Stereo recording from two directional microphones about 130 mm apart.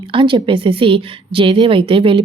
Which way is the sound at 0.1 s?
40° right (ahead or behind).